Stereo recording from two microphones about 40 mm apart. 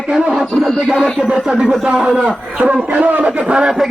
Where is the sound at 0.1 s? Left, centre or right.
Centre.